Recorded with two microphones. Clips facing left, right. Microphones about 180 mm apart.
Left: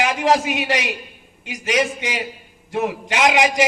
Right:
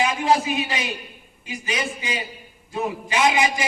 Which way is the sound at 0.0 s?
85° left.